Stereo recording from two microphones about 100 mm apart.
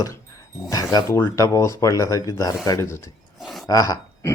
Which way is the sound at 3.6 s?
35° left (ahead or behind).